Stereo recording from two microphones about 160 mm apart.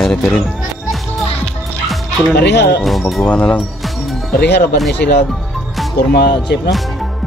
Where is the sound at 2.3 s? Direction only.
90° left.